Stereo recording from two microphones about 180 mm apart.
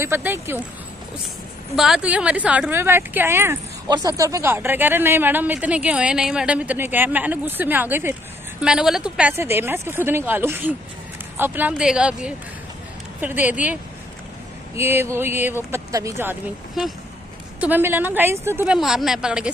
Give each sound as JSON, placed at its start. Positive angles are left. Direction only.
{"t": 0.0, "sound": "a woman's voice", "side_deg": -15}
{"t": 1.8, "sound": "a woman's voice", "side_deg": -5}
{"t": 14.8, "sound": "a woman's voice", "side_deg": -15}
{"t": 17.6, "sound": "a woman's voice", "side_deg": -10}